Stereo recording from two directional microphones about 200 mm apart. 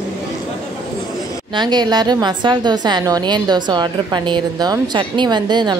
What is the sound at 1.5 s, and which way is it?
A woman's voice, 20° right (ahead or behind).